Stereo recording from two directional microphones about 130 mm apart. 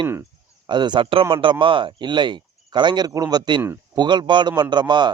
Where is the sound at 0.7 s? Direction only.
35° right (ahead or behind).